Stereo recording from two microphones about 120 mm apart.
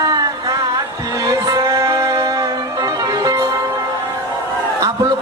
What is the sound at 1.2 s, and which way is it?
Music, 30° right (ahead or behind).